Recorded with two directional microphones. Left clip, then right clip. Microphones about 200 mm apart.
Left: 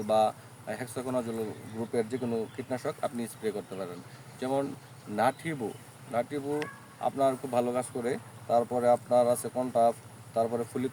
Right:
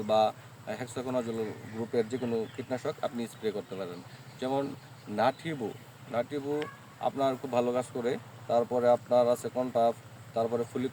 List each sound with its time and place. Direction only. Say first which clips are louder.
0.1 s a man's voice: even; 15° left (ahead or behind)